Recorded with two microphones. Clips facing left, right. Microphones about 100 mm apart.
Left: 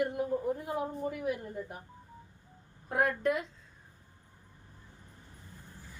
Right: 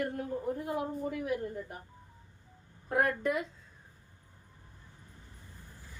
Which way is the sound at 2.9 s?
Centre (ahead or behind).